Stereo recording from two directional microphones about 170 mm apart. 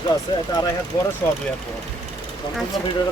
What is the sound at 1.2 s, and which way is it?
Speech, 10° left (ahead or behind).